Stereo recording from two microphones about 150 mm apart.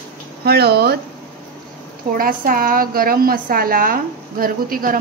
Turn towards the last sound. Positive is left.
turn(degrees=-70)  # may be behind; listen again after turning